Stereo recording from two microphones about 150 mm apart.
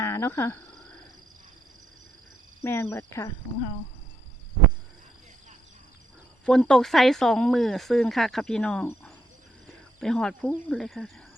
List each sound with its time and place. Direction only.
0.0 s speech: 15° left (ahead or behind)
2.6 s speech: 15° left (ahead or behind)
6.4 s speech: 5° left (ahead or behind)
9.6 s a sound: 5° left (ahead or behind)
10.7 s speech: centre (ahead or behind)